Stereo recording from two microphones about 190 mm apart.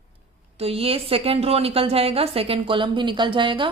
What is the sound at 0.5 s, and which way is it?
A woman's voice, 30° right (ahead or behind).